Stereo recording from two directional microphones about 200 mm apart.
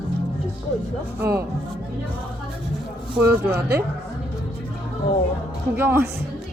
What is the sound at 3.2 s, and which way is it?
Speech, 10° right (ahead or behind).